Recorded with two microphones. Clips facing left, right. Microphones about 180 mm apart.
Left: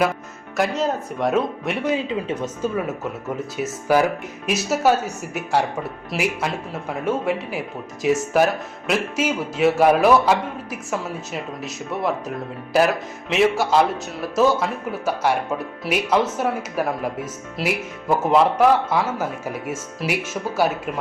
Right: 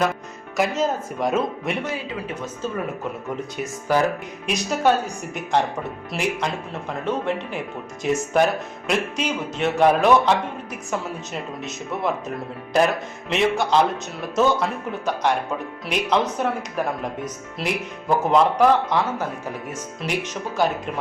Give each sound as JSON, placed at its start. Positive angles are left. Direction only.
{"t": 0.5, "sound": "speech", "side_deg": 0}
{"t": 1.8, "sound": "speech", "side_deg": 20}
{"t": 3.2, "sound": "speech", "side_deg": 0}